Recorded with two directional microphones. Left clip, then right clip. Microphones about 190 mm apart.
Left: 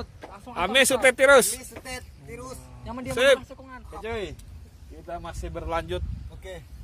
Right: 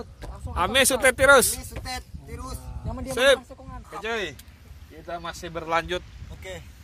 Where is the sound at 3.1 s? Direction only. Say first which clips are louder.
Even; 5° left (ahead or behind).